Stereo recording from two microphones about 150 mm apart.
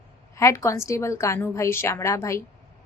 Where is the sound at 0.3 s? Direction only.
20° left (ahead or behind).